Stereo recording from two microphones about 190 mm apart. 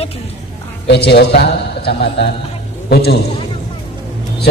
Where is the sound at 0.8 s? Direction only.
60° left (ahead or behind).